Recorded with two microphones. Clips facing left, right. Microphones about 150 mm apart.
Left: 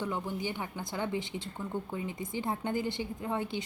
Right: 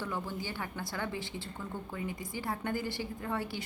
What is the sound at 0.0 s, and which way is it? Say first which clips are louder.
A woman's voice: left 3 dB; 20° left (ahead or behind).